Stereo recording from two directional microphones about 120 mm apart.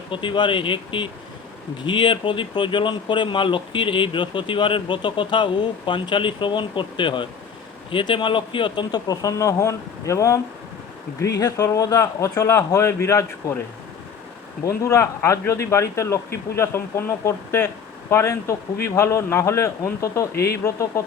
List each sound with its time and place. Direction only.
0.1 s a man's voice: 45° left (ahead or behind); by 13.6 s 25° left (ahead or behind)
14.6 s a man's voice: 25° left (ahead or behind)